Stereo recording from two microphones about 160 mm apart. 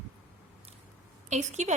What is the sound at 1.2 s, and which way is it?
Speech, 45° right (ahead or behind).